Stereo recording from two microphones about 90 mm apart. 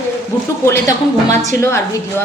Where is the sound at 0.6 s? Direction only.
30° left (ahead or behind).